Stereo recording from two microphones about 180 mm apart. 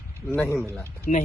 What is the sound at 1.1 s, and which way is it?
Speech, 45° left (ahead or behind).